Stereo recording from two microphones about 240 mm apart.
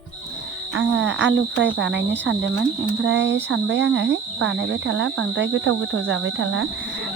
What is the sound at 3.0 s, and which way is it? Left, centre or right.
Speech, right.